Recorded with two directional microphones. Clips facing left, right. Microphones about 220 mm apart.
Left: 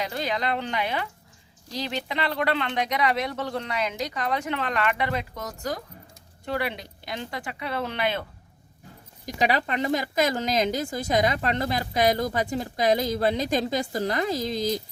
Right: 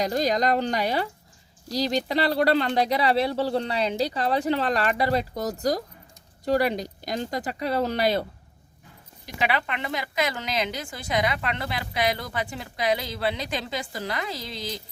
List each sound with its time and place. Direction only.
0.0 s speech: 40° right (ahead or behind)
9.2 s a woman's voice: 40° left (ahead or behind)